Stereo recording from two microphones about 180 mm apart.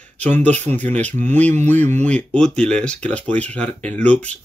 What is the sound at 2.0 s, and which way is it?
Speech, 5° left (ahead or behind).